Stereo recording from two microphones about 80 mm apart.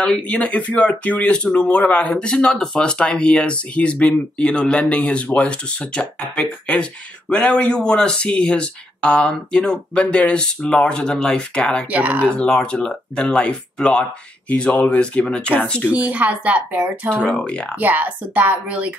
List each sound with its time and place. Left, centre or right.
0.0 s speech: centre
11.9 s a woman's voice: centre
12.4 s speech: centre
15.9 s a woman's voice: centre
17.1 s speech: centre
17.7 s a woman's voice: right